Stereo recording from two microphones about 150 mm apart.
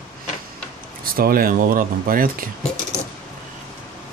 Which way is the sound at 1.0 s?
75° right (ahead or behind).